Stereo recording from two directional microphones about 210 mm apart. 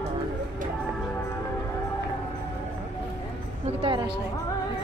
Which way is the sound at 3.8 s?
25° right (ahead or behind).